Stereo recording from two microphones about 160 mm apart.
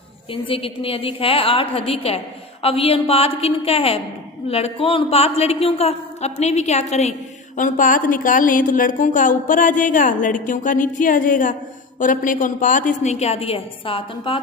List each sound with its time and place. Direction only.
0.3 s a woman's voice: 35° left (ahead or behind)
7.5 s a woman's voice: 55° left (ahead or behind); by 14.3 s 35° left (ahead or behind)